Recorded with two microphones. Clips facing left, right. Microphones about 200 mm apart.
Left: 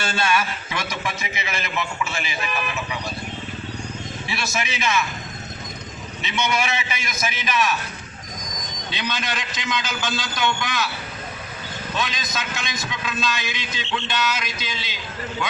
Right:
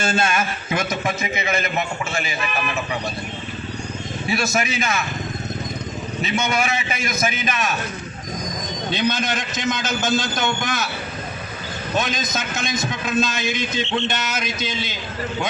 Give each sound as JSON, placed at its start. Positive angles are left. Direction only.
{"t": 0.0, "sound": "a man's voice", "side_deg": -45}
{"t": 4.3, "sound": "a man's voice", "side_deg": -50}
{"t": 6.2, "sound": "a man's voice", "side_deg": -50}
{"t": 8.9, "sound": "a man's voice", "side_deg": -45}
{"t": 11.9, "sound": "a man's voice", "side_deg": -45}